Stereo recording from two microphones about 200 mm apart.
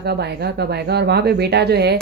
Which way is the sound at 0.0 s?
55° right (ahead or behind).